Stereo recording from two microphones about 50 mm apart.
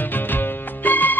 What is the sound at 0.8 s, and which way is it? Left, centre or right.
Music, left.